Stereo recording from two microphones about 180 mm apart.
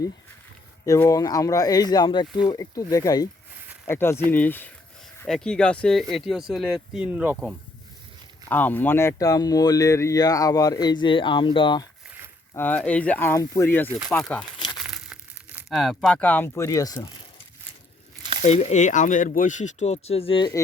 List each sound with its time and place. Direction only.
0.9 s speech: 15° left (ahead or behind); by 7.3 s 5° right (ahead or behind)
8.4 s speech: 10° left (ahead or behind); by 11.9 s 25° left (ahead or behind)
12.5 s speech: 10° left (ahead or behind)
14.8 s crumpling: 5° right (ahead or behind); by 17.4 s 20° left (ahead or behind)
18.2 s a sound: 30° right (ahead or behind)
18.4 s speech: 40° left (ahead or behind)